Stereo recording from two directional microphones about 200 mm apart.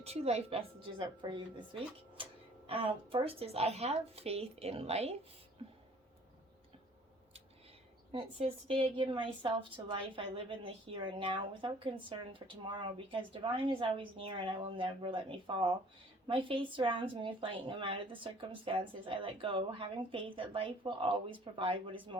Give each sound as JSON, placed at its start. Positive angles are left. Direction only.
{"t": 0.0, "sound": "a woman's voice", "side_deg": -30}
{"t": 8.1, "sound": "a woman's voice", "side_deg": -30}